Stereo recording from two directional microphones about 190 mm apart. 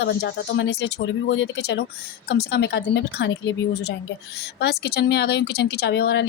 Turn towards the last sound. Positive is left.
turn(degrees=65)  # may be behind; listen again after turning